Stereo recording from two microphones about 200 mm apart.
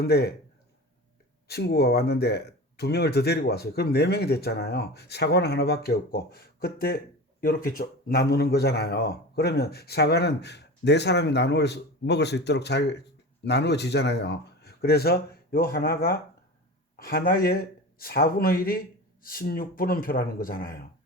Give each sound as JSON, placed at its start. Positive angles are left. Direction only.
{"t": 0.0, "sound": "speech", "side_deg": 50}
{"t": 1.5, "sound": "speech", "side_deg": 55}